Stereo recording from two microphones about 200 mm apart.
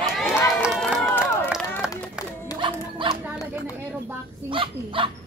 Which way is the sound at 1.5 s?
Centre (ahead or behind).